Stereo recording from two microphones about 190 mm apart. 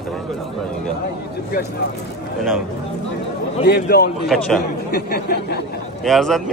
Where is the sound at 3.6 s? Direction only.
55° left (ahead or behind).